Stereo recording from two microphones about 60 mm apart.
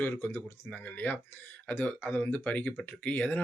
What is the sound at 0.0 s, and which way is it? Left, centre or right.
Speech, left.